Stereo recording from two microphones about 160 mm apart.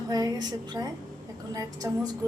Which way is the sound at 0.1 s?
25° right (ahead or behind).